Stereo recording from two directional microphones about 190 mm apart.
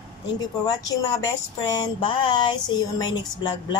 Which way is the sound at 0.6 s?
20° left (ahead or behind).